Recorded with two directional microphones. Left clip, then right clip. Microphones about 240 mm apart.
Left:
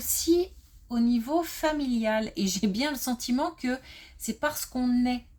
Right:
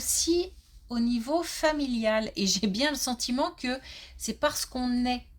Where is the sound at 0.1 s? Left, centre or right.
Right.